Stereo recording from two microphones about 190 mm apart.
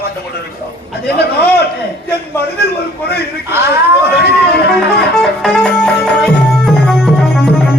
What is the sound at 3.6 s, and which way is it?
Speech, 60° left (ahead or behind).